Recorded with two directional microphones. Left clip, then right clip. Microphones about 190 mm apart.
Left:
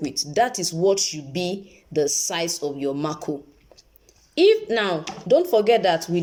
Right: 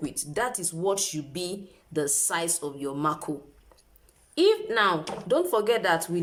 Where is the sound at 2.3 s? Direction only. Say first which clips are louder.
Left 4 dB; 15° left (ahead or behind).